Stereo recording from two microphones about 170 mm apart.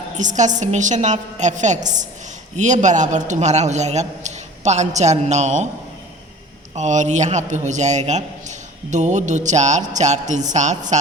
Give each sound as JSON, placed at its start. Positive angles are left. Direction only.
{"t": 0.2, "sound": "a man's voice", "side_deg": -45}
{"t": 6.7, "sound": "a man's voice", "side_deg": -45}